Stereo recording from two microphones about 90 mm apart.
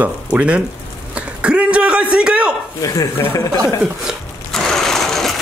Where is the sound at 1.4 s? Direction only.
10° right (ahead or behind).